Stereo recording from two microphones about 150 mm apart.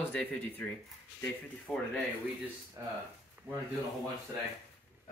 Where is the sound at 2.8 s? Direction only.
25° right (ahead or behind).